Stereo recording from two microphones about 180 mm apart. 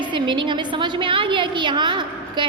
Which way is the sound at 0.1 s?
25° right (ahead or behind).